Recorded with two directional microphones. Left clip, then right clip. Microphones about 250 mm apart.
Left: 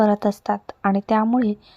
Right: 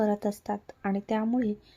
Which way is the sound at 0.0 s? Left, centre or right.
Centre.